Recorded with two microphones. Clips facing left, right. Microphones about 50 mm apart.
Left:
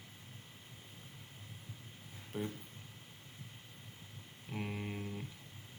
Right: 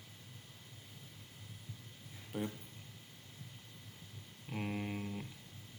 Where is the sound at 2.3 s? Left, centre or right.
Centre.